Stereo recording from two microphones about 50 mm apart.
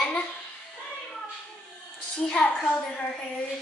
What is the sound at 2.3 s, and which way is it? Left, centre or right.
Speech, left.